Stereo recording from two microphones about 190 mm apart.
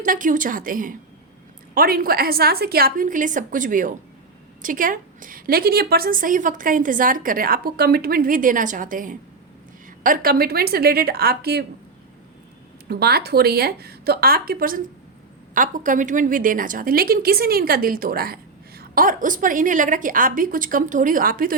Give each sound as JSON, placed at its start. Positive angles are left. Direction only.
{"t": 0.0, "sound": "a woman's voice", "side_deg": -45}
{"t": 12.9, "sound": "a woman's voice", "side_deg": -55}